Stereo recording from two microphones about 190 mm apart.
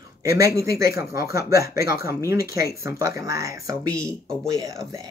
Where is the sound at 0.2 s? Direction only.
15° right (ahead or behind).